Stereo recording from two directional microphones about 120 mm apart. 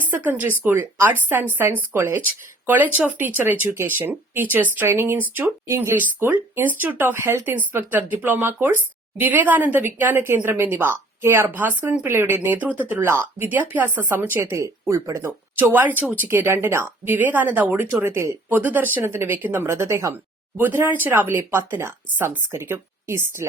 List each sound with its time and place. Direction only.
0.1 s a woman's voice: 15° right (ahead or behind)